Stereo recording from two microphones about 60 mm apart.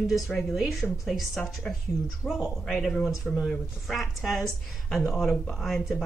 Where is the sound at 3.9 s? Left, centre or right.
Centre.